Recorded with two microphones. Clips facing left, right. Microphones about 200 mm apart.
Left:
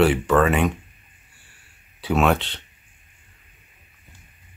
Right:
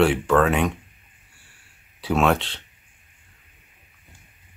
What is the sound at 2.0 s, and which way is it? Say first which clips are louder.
Speech: even; centre (ahead or behind).